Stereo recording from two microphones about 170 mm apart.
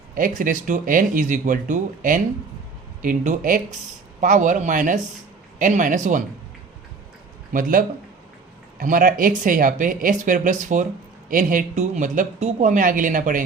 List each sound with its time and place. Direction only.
0.1 s speech: 55° right (ahead or behind)
7.5 s speech: 55° right (ahead or behind)